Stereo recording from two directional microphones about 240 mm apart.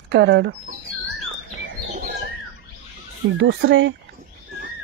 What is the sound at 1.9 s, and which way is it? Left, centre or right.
Bird, right.